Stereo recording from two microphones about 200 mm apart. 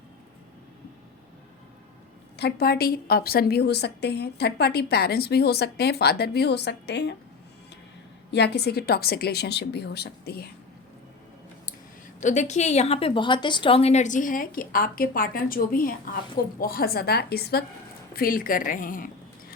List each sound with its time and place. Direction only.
2.3 s a woman's voice: 55° left (ahead or behind)
8.3 s a woman's voice: 55° left (ahead or behind)
12.2 s a woman's voice: 35° left (ahead or behind)